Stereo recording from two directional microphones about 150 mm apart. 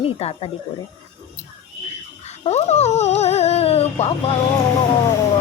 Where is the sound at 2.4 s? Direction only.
45° left (ahead or behind).